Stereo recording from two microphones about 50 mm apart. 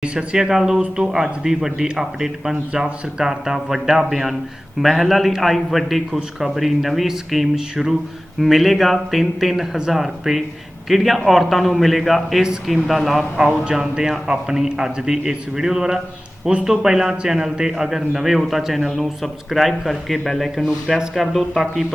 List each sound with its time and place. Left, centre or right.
0.0 s a man's voice: centre
13.7 s a man's voice: centre